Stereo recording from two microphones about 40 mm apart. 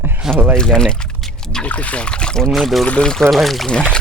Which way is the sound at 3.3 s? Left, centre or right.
Centre.